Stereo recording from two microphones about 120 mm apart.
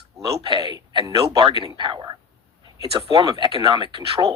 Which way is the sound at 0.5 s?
35° right (ahead or behind).